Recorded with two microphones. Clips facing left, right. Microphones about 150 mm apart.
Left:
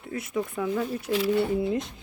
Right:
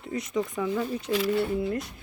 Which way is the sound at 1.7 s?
20° left (ahead or behind).